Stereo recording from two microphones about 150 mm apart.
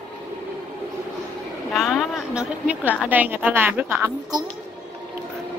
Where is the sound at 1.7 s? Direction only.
Centre (ahead or behind); by 4.5 s 20° right (ahead or behind).